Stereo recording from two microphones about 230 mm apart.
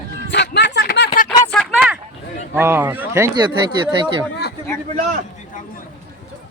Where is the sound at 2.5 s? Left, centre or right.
Centre.